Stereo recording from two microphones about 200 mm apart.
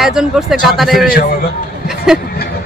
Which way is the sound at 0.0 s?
Centre (ahead or behind).